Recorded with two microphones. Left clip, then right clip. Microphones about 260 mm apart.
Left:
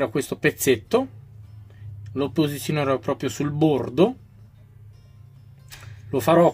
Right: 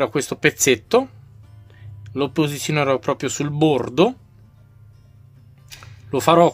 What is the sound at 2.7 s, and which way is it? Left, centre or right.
Speech, right.